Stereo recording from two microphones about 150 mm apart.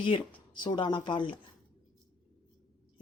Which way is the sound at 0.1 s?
35° left (ahead or behind).